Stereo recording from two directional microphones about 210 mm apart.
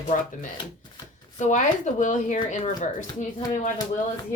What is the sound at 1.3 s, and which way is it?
Speech, 35° left (ahead or behind).